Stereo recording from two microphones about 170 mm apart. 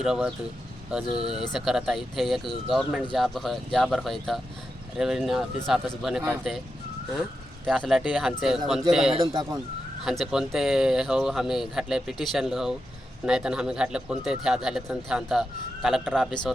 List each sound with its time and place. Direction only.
0.0 s speech: 5° right (ahead or behind)
7.9 s speech: 5° right (ahead or behind)
9.2 s speech: 25° right (ahead or behind)
10.0 s speech: centre (ahead or behind)